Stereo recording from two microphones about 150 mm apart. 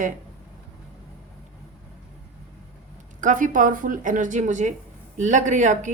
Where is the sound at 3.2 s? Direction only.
60° right (ahead or behind).